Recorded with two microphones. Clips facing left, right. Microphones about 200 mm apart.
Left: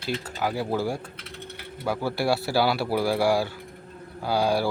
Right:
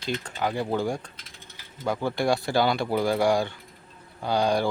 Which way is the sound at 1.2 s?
65° left (ahead or behind).